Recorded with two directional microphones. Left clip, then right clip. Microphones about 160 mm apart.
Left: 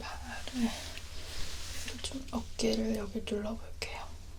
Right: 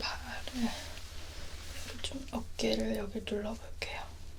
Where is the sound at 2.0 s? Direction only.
10° left (ahead or behind).